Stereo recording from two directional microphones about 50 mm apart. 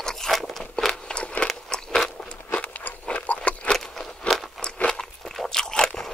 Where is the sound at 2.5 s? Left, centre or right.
Left.